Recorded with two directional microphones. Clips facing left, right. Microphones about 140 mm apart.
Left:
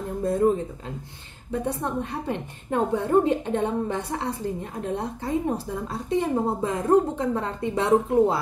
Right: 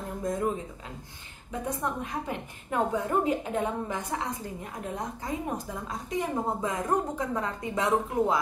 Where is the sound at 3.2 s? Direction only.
30° left (ahead or behind).